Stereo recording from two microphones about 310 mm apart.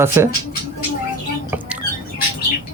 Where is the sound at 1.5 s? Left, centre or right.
Centre.